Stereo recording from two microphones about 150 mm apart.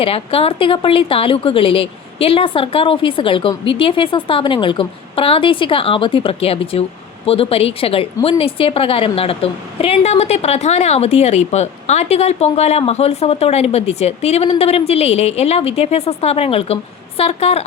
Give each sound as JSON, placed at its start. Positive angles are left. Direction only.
{"t": 0.0, "sound": "a woman's voice", "side_deg": 40}